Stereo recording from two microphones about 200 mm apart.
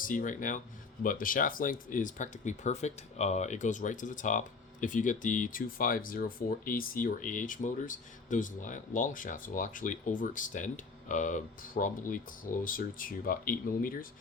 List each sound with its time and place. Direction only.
0.0 s speech: 40° left (ahead or behind)